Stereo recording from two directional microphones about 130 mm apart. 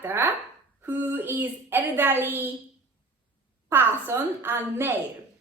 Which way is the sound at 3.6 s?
20° right (ahead or behind).